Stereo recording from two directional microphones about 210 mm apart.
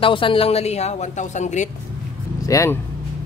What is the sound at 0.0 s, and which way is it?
A woman's voice, 25° left (ahead or behind).